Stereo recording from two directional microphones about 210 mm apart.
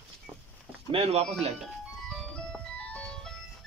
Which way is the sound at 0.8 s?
30° right (ahead or behind).